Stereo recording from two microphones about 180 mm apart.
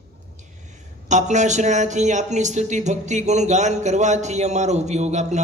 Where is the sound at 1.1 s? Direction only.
40° right (ahead or behind).